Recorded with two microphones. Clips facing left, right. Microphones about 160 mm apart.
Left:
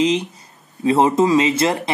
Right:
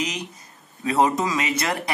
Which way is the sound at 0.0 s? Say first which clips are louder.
Left 11 dB; 25° left (ahead or behind).